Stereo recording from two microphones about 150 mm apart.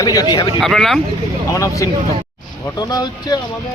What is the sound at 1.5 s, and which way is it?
A man's voice, 20° left (ahead or behind).